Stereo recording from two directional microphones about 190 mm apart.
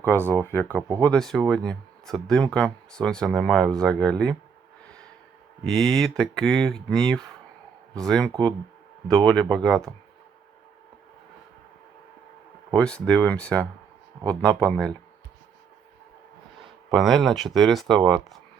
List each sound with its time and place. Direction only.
0.4 s speech: 10° left (ahead or behind)
0.8 s speech: 20° right (ahead or behind)
1.0 s speech: 5° left (ahead or behind)
5.6 s speech: centre (ahead or behind)
12.7 s speech: 5° left (ahead or behind)
16.9 s speech: centre (ahead or behind)